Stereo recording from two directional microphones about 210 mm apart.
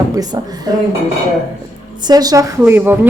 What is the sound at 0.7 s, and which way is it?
Speech, 20° right (ahead or behind).